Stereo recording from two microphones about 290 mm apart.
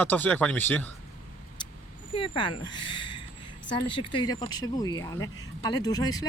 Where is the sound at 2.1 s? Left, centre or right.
Centre.